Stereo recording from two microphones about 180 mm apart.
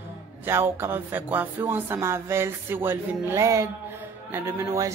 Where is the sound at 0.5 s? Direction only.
15° right (ahead or behind).